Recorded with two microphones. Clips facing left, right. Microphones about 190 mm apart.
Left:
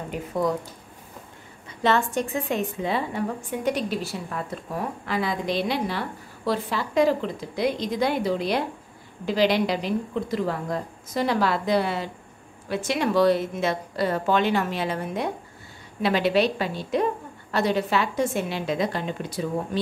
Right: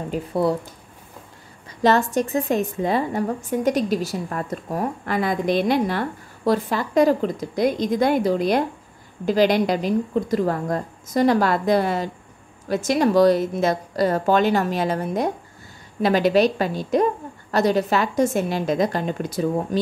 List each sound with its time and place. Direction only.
0.1 s speech: 30° right (ahead or behind)
1.8 s a woman's voice: 40° right (ahead or behind)